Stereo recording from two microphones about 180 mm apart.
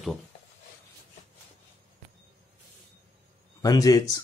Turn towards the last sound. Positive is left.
turn(degrees=20)  # may be behind; listen again after turning